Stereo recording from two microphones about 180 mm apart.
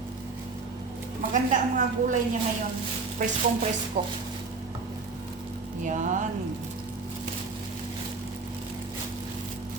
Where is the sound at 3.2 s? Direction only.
45° right (ahead or behind).